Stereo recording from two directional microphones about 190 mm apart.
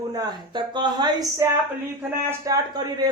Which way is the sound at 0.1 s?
20° right (ahead or behind).